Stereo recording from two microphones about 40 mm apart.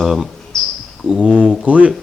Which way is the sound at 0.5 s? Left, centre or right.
Centre.